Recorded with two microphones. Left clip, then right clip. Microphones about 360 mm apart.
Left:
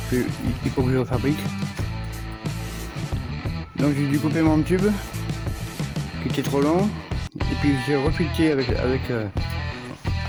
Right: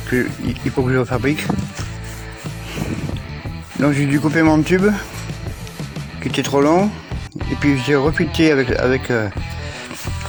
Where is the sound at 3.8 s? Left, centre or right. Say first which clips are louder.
Right 6 dB; left.